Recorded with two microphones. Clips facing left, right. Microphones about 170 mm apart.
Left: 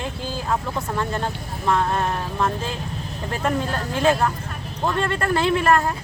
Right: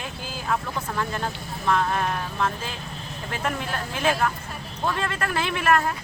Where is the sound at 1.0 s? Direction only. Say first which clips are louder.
Left 3 dB; 30° left (ahead or behind).